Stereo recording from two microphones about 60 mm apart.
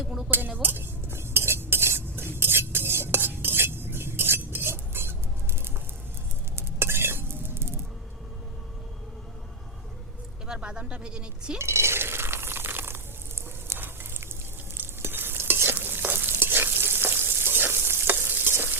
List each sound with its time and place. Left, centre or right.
0.0 s speech: centre
0.3 s cutlery: right
6.6 s stir: right
10.4 s speech: centre
11.5 s a sound: right
14.8 s stir: right